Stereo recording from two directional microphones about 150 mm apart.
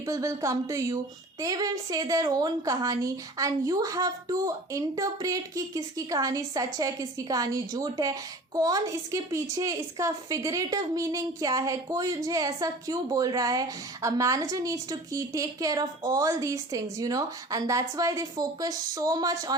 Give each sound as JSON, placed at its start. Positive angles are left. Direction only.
{"t": 0.0, "sound": "a woman's voice", "side_deg": -20}